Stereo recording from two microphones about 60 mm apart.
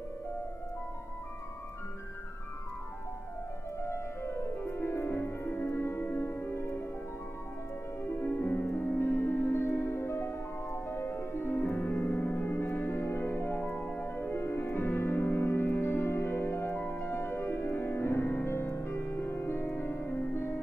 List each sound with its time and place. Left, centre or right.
3.8 s music: left
8.0 s music: left